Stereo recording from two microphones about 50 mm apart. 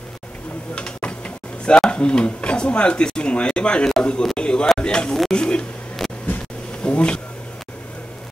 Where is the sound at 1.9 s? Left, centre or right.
Left.